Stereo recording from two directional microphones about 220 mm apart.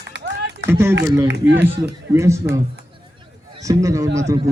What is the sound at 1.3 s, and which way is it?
Speech, 50° right (ahead or behind).